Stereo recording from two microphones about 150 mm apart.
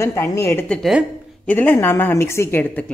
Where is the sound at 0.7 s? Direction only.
Centre (ahead or behind).